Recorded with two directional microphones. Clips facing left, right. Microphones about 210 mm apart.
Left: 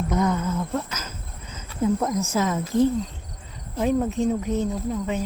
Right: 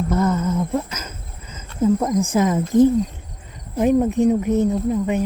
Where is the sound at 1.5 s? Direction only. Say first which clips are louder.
Right 5 dB; centre (ahead or behind).